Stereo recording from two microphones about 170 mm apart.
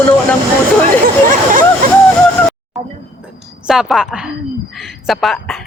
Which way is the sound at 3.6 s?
5° right (ahead or behind).